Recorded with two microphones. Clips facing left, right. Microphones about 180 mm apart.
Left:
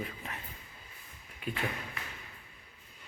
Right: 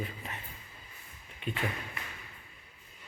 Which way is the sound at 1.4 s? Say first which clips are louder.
Right 1 dB; 5° left (ahead or behind).